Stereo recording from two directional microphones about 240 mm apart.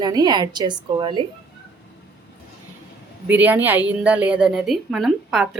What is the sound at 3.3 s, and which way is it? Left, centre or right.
A woman's voice, centre.